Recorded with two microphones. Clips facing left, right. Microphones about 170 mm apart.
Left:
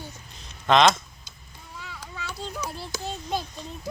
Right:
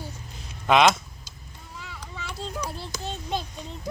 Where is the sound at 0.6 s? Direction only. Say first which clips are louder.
Even; 10° right (ahead or behind).